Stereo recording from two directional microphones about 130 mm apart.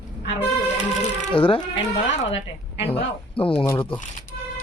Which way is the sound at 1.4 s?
45° left (ahead or behind).